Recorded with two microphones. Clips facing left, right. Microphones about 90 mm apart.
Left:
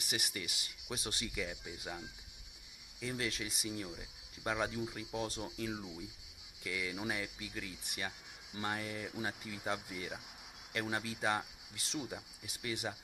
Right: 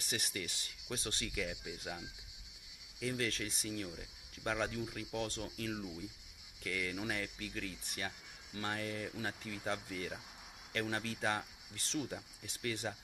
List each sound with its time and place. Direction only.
0.0 s speech: 10° left (ahead or behind)
3.0 s speech: 10° left (ahead or behind)
8.5 s speech: 20° left (ahead or behind)